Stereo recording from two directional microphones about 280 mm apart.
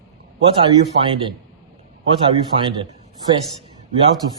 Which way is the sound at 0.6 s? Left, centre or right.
Centre.